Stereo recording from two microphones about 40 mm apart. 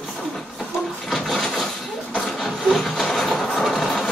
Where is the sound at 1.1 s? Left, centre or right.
Centre.